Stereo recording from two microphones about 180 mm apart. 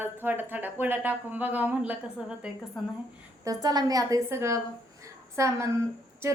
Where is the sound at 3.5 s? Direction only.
20° right (ahead or behind).